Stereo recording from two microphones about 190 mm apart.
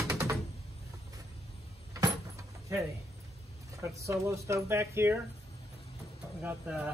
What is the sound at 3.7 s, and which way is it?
Speech, 15° right (ahead or behind).